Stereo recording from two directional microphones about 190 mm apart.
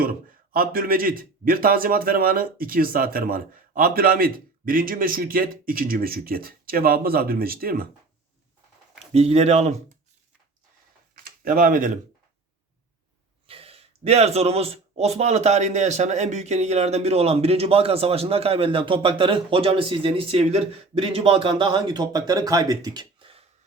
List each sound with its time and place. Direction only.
0.5 s a man's voice: 50° right (ahead or behind)
9.1 s speech: 35° right (ahead or behind)
11.2 s a sound: 50° right (ahead or behind)
13.5 s speech: 30° right (ahead or behind)